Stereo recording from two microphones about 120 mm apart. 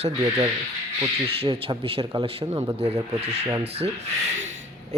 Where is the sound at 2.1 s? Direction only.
35° right (ahead or behind).